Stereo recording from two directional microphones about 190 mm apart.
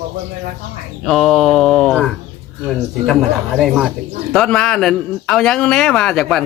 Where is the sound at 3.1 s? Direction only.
Centre (ahead or behind).